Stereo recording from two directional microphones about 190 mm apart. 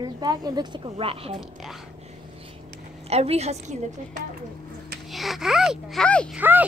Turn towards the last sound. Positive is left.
turn(degrees=-10)  # may be behind; listen again after turning